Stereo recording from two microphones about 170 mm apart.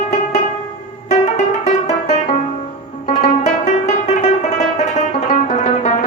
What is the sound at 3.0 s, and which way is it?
Music, 45° left (ahead or behind).